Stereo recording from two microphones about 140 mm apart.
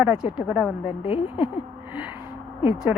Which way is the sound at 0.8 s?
40° left (ahead or behind).